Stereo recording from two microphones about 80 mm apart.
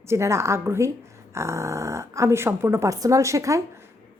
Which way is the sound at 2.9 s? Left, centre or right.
Right.